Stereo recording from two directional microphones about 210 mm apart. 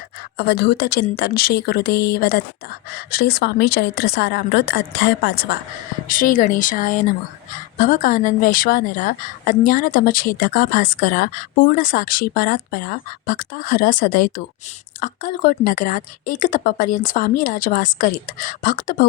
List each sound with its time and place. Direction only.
0.3 s speech: 50° left (ahead or behind)
6.1 s a woman's voice: 40° left (ahead or behind)